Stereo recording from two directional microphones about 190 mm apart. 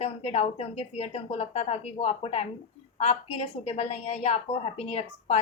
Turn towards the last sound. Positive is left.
turn(degrees=35)  # may be behind; listen again after turning